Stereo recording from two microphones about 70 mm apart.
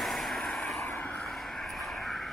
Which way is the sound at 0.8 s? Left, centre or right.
Left.